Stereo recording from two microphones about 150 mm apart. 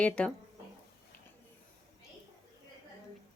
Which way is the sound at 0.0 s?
5° left (ahead or behind).